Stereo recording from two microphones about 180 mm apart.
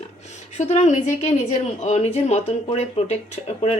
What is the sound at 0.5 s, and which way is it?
Speech, 40° left (ahead or behind).